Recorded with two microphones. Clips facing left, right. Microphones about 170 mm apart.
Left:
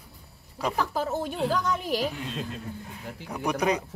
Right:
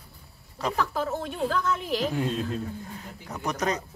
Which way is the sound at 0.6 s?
10° left (ahead or behind).